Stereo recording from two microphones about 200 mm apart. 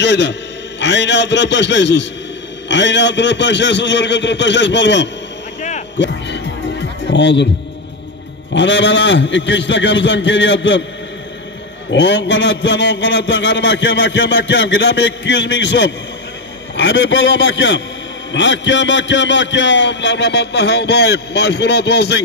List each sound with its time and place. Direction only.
0.0 s a man's voice: 60° left (ahead or behind)
5.9 s music: 60° left (ahead or behind)
8.5 s a man's voice: 65° left (ahead or behind)
11.9 s a man's voice: 60° left (ahead or behind)